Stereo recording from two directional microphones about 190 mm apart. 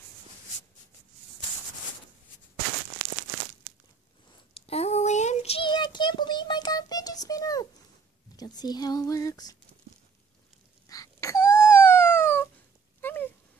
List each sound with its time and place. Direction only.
4.6 s child singing: 30° left (ahead or behind)
8.4 s speech: 20° left (ahead or behind)
10.9 s wail: 15° left (ahead or behind)
13.0 s a sound: 10° left (ahead or behind)